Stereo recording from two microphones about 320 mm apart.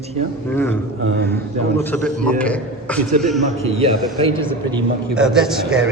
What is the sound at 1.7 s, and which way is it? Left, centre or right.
A man's voice, centre.